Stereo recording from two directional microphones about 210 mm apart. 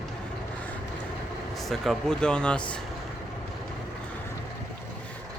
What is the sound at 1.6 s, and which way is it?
Speech, centre (ahead or behind).